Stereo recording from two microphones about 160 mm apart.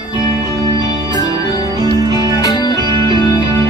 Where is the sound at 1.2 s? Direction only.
25° left (ahead or behind).